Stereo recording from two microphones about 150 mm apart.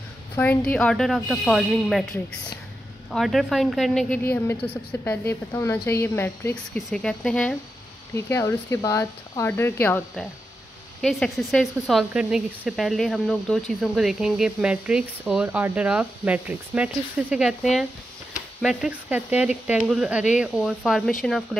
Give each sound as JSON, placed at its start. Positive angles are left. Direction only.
{"t": 0.4, "sound": "speech", "side_deg": 10}
{"t": 3.1, "sound": "speech", "side_deg": 0}
{"t": 4.2, "sound": "speech", "side_deg": 15}
{"t": 8.1, "sound": "speech", "side_deg": 20}
{"t": 11.0, "sound": "speech", "side_deg": 0}